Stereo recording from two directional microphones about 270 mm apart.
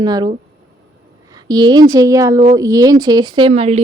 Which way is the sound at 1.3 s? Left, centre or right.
Centre.